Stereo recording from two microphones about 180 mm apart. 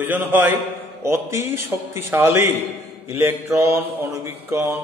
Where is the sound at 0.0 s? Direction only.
10° right (ahead or behind).